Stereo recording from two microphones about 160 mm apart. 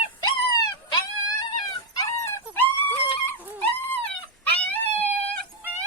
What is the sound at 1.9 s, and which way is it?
Dog, 20° left (ahead or behind).